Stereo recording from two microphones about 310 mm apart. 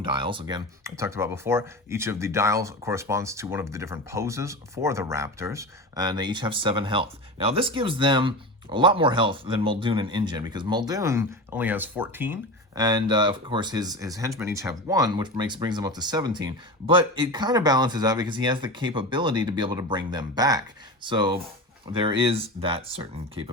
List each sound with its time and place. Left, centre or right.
0.0 s speech: centre